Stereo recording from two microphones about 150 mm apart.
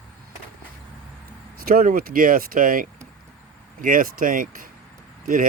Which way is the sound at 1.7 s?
70° right (ahead or behind).